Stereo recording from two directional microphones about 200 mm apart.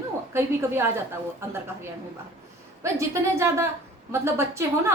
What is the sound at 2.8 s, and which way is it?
A woman's voice, 15° right (ahead or behind).